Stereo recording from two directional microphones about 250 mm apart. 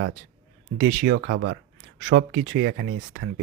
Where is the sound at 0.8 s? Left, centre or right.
Right.